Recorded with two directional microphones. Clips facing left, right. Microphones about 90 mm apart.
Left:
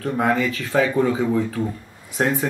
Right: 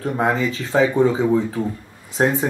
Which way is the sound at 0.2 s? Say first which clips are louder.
Even; 20° right (ahead or behind).